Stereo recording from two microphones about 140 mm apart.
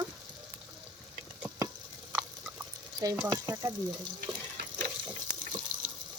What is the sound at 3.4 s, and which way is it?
Speech, 20° right (ahead or behind).